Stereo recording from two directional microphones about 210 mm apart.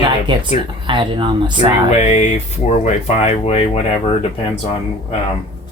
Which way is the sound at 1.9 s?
35° left (ahead or behind).